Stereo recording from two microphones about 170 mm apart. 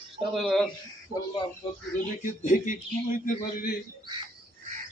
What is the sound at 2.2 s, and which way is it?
Speech, 50° left (ahead or behind).